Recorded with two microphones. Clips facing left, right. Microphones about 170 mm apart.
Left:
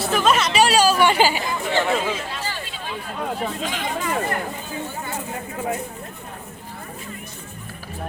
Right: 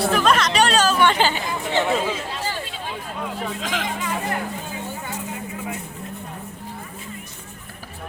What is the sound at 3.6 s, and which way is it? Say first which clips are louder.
Speech: right 1 dB; 90° right.